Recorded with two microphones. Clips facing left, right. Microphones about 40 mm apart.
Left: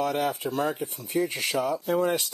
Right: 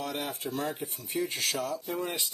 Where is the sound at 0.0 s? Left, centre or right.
Left.